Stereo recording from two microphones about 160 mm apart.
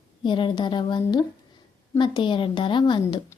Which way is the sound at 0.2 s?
30° left (ahead or behind).